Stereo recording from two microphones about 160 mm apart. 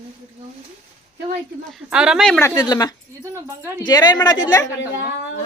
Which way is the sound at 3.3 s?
15° right (ahead or behind).